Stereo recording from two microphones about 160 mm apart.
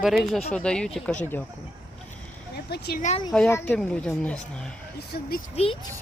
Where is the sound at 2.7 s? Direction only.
80° left.